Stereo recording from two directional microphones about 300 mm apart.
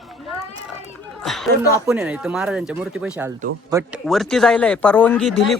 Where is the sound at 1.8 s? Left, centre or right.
Centre.